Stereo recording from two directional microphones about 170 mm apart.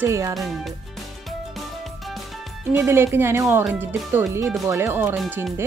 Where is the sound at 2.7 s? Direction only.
15° right (ahead or behind).